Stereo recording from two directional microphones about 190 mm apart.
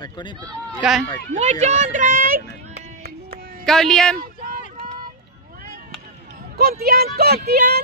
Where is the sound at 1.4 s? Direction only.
35° right (ahead or behind).